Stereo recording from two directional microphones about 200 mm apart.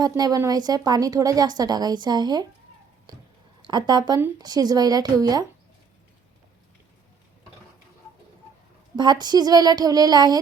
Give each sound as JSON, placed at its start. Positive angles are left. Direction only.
{"t": 0.0, "sound": "speech", "side_deg": -20}
{"t": 3.7, "sound": "speech", "side_deg": -20}
{"t": 9.0, "sound": "speech", "side_deg": -20}